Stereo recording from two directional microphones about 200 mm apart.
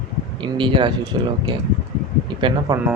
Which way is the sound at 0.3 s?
25° right (ahead or behind).